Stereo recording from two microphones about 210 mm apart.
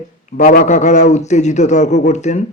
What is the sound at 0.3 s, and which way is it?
A man's voice, 35° left (ahead or behind).